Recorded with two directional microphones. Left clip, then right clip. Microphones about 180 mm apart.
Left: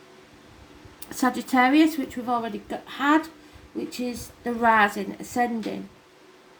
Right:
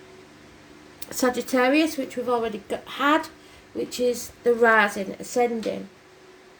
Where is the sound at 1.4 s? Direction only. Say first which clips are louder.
Left 3 dB; 30° right (ahead or behind).